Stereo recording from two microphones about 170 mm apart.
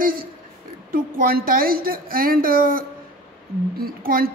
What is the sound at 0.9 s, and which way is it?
A woman's voice, 60° right (ahead or behind).